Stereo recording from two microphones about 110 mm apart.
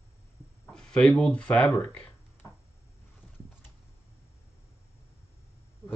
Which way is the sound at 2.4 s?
30° left (ahead or behind).